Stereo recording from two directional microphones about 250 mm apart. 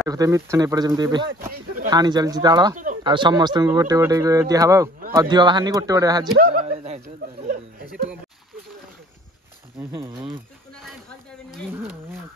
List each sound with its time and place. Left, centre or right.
0.0 s speech: centre
6.3 s a sound: right
9.8 s speech: centre
11.7 s speech: centre